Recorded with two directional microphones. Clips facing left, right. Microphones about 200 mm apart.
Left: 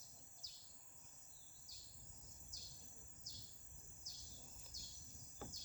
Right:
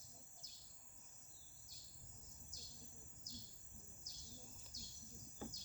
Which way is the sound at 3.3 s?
45° left (ahead or behind).